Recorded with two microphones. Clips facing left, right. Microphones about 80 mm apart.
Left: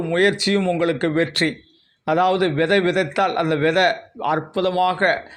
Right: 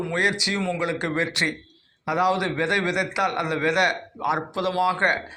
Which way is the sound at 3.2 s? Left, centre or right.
Centre.